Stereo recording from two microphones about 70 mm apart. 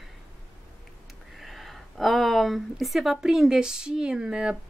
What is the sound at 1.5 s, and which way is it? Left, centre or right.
Speech, centre.